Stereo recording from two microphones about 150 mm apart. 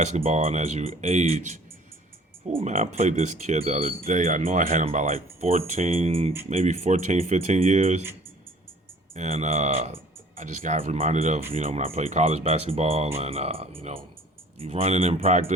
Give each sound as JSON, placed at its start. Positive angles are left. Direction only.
{"t": 0.0, "sound": "speech", "side_deg": -50}
{"t": 9.1, "sound": "speech", "side_deg": -50}